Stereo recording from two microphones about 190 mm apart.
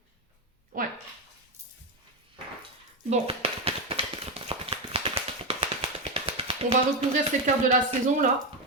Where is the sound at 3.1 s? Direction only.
30° right (ahead or behind).